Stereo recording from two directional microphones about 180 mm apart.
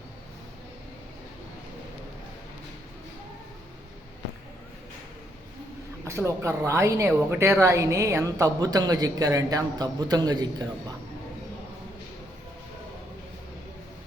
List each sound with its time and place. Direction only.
6.1 s a woman's voice: 15° right (ahead or behind)